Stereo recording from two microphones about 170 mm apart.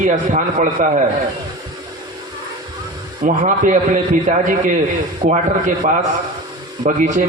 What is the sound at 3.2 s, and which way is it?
A man's voice, 50° right (ahead or behind).